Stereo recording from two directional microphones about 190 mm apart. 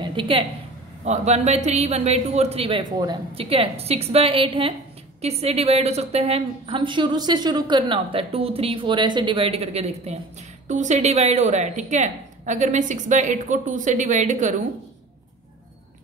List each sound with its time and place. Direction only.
0.0 s a woman's voice: 25° right (ahead or behind); by 14.5 s 40° right (ahead or behind)